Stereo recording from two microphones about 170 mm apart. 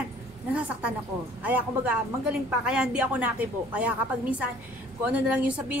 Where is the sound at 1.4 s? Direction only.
10° right (ahead or behind).